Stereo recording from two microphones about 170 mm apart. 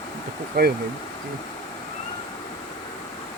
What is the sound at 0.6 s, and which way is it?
Speech, 65° right (ahead or behind).